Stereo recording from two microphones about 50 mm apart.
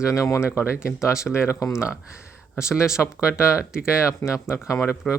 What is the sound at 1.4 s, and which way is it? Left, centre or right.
Speech, left.